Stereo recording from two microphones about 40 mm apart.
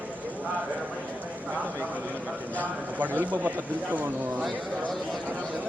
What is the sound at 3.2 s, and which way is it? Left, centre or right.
Speech, right.